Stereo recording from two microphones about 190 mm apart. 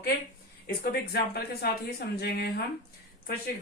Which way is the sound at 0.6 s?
55° left (ahead or behind).